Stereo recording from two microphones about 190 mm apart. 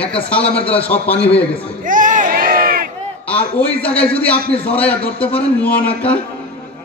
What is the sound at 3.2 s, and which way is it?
A man's voice, 5° left (ahead or behind).